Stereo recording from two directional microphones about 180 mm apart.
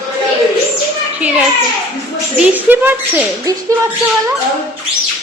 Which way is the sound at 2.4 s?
10° right (ahead or behind).